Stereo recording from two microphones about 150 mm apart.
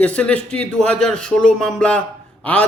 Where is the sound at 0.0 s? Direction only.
10° left (ahead or behind).